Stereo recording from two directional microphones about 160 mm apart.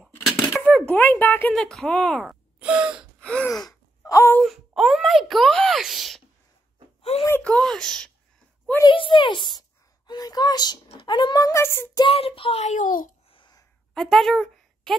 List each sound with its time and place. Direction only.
0.5 s speech: 5° left (ahead or behind)
2.2 s speech: 5° right (ahead or behind)
3.2 s gasp: 5° left (ahead or behind)
3.5 s wail: 20° left (ahead or behind)
4.4 s speech: centre (ahead or behind)
7.0 s a sound: 35° left (ahead or behind)
7.2 s speech: 10° left (ahead or behind)
8.8 s a woman's voice: 30° left (ahead or behind); by 12.0 s 15° left (ahead or behind)
12.0 s a child's voice: 35° left (ahead or behind); by 13.1 s 55° left (ahead or behind)
13.3 s a sound: 30° left (ahead or behind)
13.9 s speech: centre (ahead or behind)